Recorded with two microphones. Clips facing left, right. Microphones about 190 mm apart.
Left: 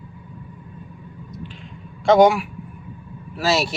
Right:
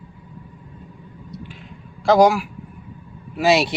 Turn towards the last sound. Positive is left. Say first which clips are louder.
# right 4 dB
turn(degrees=-15)  # may be behind; listen again after turning